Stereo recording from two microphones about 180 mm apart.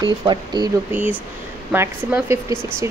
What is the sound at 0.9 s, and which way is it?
A woman's voice, 10° right (ahead or behind).